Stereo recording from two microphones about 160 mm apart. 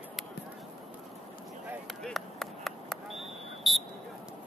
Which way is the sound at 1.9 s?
Centre (ahead or behind).